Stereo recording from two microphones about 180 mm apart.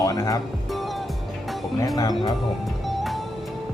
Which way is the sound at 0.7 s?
Centre (ahead or behind).